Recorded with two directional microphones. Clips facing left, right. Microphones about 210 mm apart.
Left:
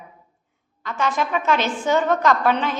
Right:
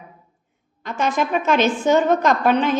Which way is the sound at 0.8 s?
20° right (ahead or behind).